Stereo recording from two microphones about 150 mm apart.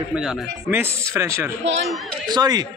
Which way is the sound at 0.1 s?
5° right (ahead or behind).